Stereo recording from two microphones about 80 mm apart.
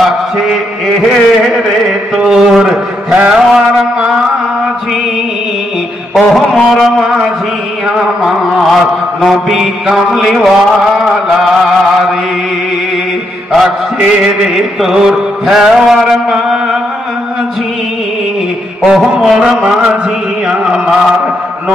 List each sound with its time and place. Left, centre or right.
1.0 s mantra: centre
6.1 s mantra: centre
13.7 s mantra: centre
14.2 s mantra: centre
18.9 s mantra: centre